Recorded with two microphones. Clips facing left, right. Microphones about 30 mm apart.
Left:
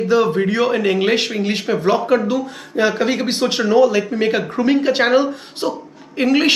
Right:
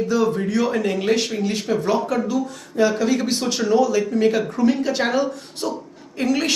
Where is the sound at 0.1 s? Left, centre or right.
Left.